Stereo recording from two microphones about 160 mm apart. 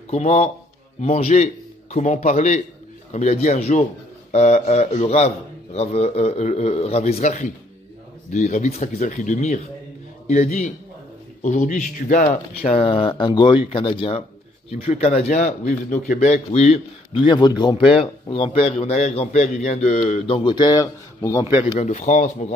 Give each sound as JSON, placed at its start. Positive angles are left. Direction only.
{"t": 0.1, "sound": "a man's voice", "side_deg": 45}
{"t": 12.6, "sound": "a man's voice", "side_deg": 35}
{"t": 21.7, "sound": "a man's voice", "side_deg": 50}